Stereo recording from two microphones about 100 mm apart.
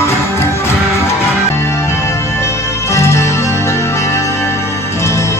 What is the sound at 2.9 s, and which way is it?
Music, 30° left (ahead or behind).